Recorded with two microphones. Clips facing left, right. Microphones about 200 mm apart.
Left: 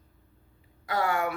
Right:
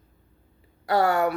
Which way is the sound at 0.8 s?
40° right (ahead or behind).